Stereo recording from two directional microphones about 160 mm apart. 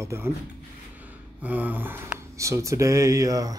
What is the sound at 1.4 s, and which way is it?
Speech, 10° right (ahead or behind).